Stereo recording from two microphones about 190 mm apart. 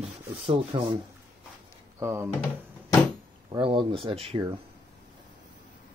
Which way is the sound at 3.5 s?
25° right (ahead or behind).